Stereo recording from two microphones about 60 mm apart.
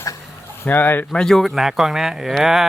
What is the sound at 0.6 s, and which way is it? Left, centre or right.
Speech, left.